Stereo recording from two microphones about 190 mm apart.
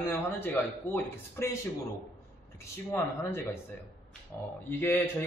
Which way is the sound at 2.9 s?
15° left (ahead or behind).